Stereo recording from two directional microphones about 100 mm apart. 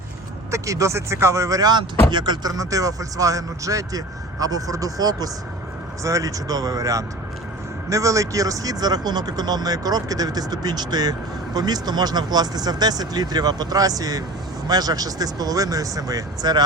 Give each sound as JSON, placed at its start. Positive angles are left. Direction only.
{"t": 0.5, "sound": "speech", "side_deg": -30}